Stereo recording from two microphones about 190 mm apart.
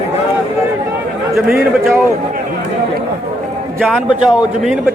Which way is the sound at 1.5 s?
10° right (ahead or behind).